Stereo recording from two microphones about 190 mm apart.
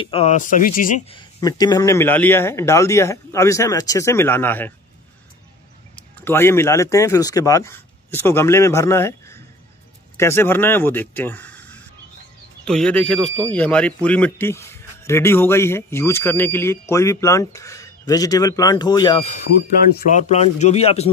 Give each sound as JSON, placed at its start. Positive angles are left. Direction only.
{"t": 0.0, "sound": "speech", "side_deg": 30}
{"t": 1.1, "sound": "speech", "side_deg": 20}
{"t": 5.9, "sound": "speech", "side_deg": 10}
{"t": 20.1, "sound": "speech", "side_deg": 40}